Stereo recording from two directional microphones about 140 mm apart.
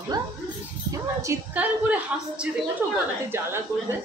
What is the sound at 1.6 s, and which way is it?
Speech, 10° right (ahead or behind).